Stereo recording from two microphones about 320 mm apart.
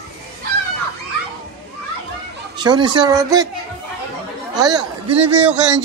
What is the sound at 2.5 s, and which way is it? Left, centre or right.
Speech, centre.